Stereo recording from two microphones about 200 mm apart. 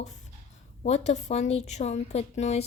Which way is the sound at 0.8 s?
35° left (ahead or behind).